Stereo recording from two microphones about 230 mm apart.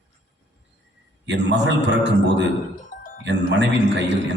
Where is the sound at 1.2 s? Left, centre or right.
Right.